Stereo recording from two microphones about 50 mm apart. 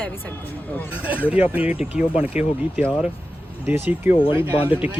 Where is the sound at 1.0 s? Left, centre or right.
Right.